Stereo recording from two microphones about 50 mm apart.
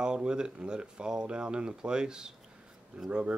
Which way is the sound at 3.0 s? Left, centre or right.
Right.